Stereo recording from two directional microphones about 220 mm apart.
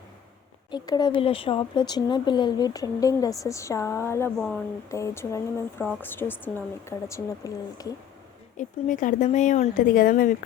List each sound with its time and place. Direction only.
0.7 s speech: 20° left (ahead or behind)
8.5 s speech: 35° left (ahead or behind)